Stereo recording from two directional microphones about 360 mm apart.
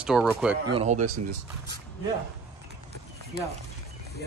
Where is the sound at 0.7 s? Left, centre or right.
Centre.